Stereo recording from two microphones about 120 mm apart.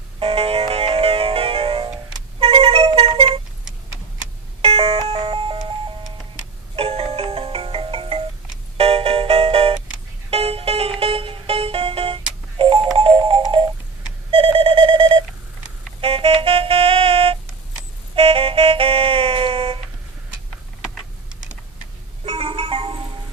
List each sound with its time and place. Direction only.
0.2 s music: 55° right (ahead or behind)
4.6 s doorbell: 55° right (ahead or behind)
5.0 s music: 50° right (ahead or behind)
14.3 s a sound: 50° right (ahead or behind)
16.0 s music: 50° right (ahead or behind)
22.3 s music: 50° right (ahead or behind)